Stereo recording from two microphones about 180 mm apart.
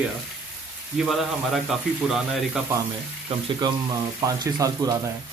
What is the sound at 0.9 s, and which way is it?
Speech, centre (ahead or behind).